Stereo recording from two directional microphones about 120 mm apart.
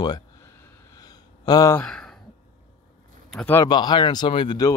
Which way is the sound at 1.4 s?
35° left (ahead or behind).